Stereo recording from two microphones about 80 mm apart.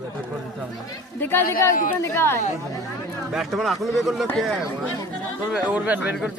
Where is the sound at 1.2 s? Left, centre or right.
Left.